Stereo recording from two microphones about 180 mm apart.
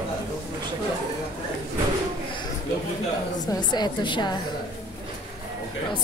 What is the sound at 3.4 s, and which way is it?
Speech, 20° left (ahead or behind).